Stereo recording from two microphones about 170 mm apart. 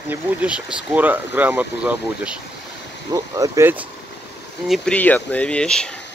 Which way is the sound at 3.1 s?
20° right (ahead or behind).